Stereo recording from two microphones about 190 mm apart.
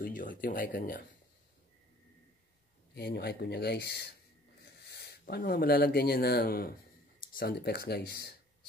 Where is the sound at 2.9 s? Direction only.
60° left (ahead or behind).